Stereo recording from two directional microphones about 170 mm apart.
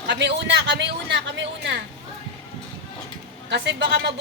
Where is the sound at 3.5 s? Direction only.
85° right.